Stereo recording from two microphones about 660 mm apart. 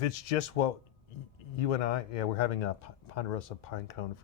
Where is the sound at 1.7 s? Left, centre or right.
Left.